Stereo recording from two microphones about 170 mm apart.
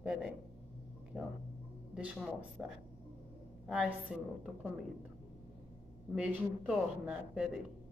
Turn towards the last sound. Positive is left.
turn(degrees=-5)  # may be behind; listen again after turning